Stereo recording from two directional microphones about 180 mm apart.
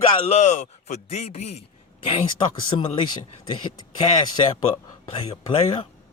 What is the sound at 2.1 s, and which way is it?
Speech, 25° left (ahead or behind).